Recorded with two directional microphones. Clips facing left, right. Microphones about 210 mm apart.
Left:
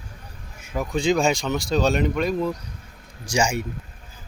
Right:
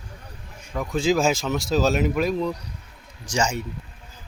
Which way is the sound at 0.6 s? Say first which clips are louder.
Even; 5° left (ahead or behind).